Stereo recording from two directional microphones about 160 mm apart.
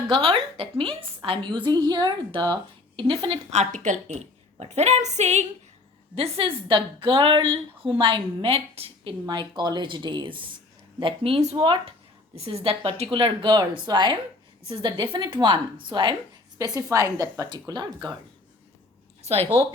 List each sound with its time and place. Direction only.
0.1 s a woman's voice: 35° right (ahead or behind)
3.5 s a woman's voice: 45° right (ahead or behind)
9.2 s a woman's voice: 30° right (ahead or behind)